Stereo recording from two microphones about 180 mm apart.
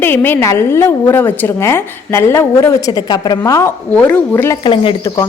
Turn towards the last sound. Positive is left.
turn(degrees=20)  # may be behind; listen again after turning